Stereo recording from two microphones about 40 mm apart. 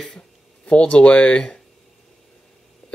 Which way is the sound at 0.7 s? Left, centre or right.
Left.